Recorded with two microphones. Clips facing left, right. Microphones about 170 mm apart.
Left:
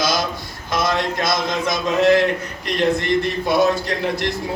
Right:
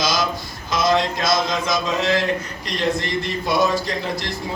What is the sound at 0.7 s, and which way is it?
A man's voice, 60° left (ahead or behind).